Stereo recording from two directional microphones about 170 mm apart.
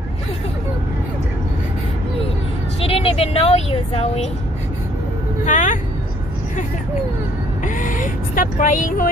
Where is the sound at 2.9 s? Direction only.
35° left (ahead or behind).